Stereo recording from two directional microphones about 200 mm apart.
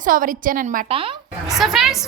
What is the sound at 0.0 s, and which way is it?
Speech, 45° right (ahead or behind).